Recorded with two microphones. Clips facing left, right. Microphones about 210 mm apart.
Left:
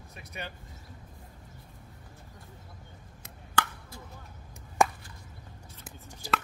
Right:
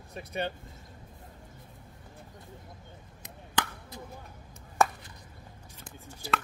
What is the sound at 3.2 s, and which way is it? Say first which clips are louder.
Chop: left 1 dB; 20° right (ahead or behind).